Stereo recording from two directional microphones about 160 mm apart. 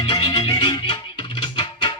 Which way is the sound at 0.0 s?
30° left (ahead or behind).